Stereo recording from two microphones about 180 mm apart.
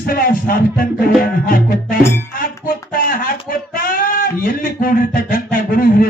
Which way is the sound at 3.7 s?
50° left (ahead or behind).